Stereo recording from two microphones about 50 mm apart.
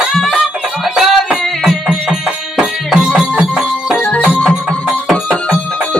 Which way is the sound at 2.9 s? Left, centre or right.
Centre.